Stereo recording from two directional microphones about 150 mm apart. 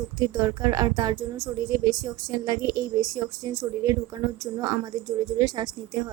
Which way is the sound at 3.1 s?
20° right (ahead or behind).